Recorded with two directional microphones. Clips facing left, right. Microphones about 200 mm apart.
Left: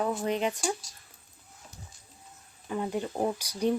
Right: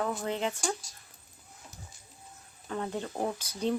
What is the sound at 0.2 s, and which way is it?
Speech, 15° left (ahead or behind).